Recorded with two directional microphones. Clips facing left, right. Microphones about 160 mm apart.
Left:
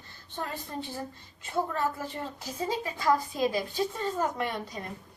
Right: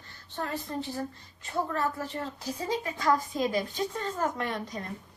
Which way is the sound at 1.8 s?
15° left (ahead or behind).